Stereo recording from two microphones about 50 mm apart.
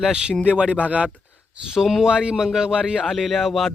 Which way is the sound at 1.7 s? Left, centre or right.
Centre.